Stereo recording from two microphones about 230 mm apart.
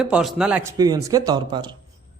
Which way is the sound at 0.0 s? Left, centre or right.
Centre.